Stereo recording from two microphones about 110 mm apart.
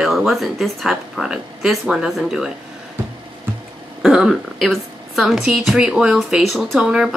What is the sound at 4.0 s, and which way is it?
A woman's voice, 5° right (ahead or behind).